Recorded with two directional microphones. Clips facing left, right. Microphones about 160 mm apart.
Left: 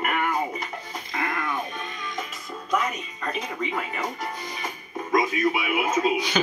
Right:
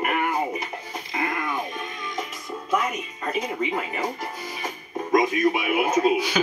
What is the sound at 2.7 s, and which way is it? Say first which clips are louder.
Music: right 1 dB; 5° right (ahead or behind).